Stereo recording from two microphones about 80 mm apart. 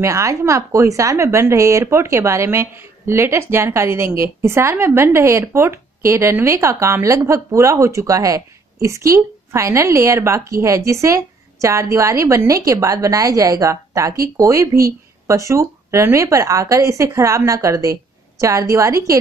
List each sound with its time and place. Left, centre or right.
0.0 s a woman's voice: right